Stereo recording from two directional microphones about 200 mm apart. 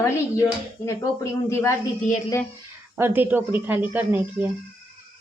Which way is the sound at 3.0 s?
10° right (ahead or behind).